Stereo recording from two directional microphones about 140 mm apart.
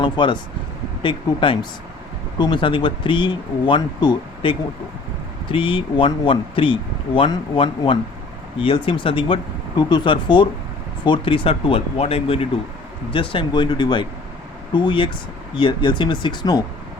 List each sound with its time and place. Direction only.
0.0 s speech: 35° left (ahead or behind)